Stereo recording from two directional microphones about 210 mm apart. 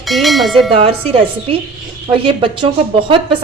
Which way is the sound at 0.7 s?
25° right (ahead or behind).